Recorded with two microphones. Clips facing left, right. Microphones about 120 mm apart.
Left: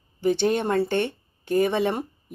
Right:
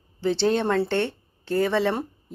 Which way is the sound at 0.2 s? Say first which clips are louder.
Even; 15° left (ahead or behind).